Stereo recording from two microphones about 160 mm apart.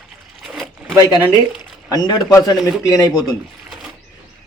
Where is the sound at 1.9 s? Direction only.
25° left (ahead or behind).